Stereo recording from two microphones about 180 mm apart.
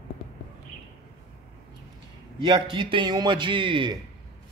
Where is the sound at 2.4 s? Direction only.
30° right (ahead or behind).